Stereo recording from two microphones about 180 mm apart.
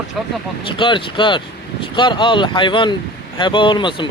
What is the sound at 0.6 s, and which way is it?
Speech, 30° left (ahead or behind).